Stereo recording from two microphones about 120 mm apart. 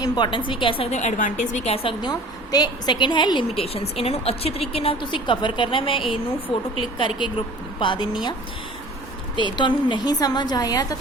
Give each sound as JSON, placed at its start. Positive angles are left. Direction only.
{"t": 0.0, "sound": "a woman's voice", "side_deg": 40}
{"t": 0.9, "sound": "a woman's voice", "side_deg": 85}
{"t": 1.7, "sound": "a woman's voice", "side_deg": 50}